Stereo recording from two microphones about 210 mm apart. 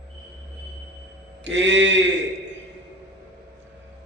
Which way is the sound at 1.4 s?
60° right (ahead or behind).